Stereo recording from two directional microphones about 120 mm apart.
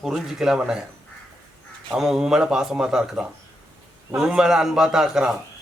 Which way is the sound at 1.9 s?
5° right (ahead or behind).